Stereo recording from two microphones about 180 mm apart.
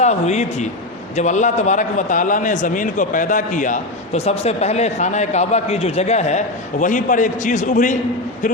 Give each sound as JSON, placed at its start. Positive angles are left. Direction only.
{"t": 0.0, "sound": "a man's voice", "side_deg": 40}